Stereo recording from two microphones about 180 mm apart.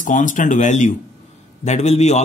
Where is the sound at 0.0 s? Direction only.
45° left (ahead or behind).